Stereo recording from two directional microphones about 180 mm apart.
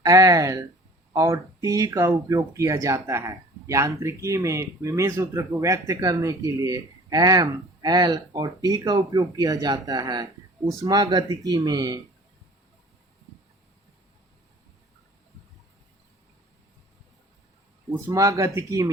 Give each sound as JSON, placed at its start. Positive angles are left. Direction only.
{"t": 0.0, "sound": "speech", "side_deg": -20}
{"t": 17.9, "sound": "speech", "side_deg": -20}